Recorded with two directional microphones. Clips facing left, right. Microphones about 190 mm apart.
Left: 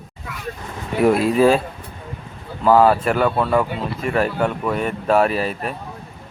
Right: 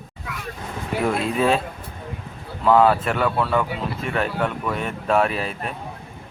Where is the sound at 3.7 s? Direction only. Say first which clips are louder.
Left 4 dB; centre (ahead or behind).